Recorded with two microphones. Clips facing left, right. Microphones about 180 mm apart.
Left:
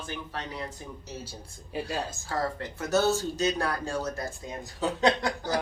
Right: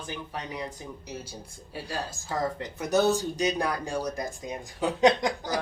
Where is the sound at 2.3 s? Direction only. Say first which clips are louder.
Right 2 dB; 20° right (ahead or behind).